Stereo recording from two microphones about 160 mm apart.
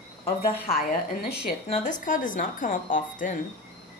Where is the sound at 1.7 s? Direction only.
55° left (ahead or behind).